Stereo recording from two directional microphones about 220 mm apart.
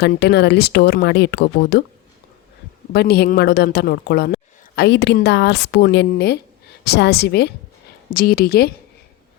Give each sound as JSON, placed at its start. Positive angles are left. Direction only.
{"t": 0.0, "sound": "speech", "side_deg": 50}
{"t": 2.9, "sound": "speech", "side_deg": 50}